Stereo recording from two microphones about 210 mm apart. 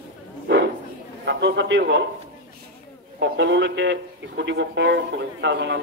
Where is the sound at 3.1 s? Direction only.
55° right (ahead or behind).